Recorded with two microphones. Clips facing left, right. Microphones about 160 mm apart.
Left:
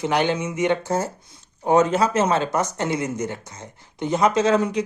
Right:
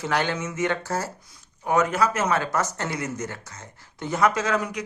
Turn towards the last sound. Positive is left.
turn(degrees=25)  # may be behind; listen again after turning